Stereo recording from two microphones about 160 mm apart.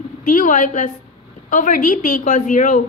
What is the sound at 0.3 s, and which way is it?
Speech, 55° left (ahead or behind).